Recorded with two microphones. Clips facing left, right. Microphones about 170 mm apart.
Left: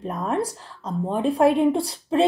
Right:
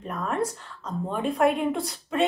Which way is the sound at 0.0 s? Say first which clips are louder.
Left 3 dB; 35° left (ahead or behind).